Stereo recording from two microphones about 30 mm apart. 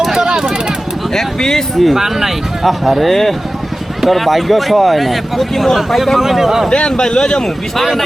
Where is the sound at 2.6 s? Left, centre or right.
Centre.